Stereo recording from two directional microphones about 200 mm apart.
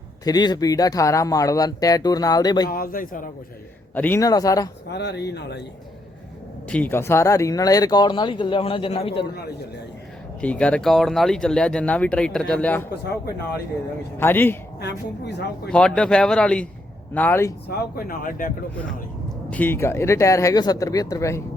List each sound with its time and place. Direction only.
0.3 s speech: 20° left (ahead or behind)
2.6 s speech: 45° left (ahead or behind)
3.9 s speech: 10° left (ahead or behind)
4.9 s speech: 55° left (ahead or behind)
6.7 s speech: 10° left (ahead or behind); by 9.2 s 30° left (ahead or behind)
10.4 s speech: 5° left (ahead or behind)
14.2 s speech: 10° left (ahead or behind)
14.8 s speech: 55° left (ahead or behind)
15.7 s speech: 5° left (ahead or behind)
17.7 s speech: 45° left (ahead or behind)
19.5 s speech: 10° left (ahead or behind)